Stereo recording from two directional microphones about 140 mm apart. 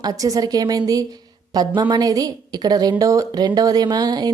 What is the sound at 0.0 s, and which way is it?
A woman's voice, 25° right (ahead or behind).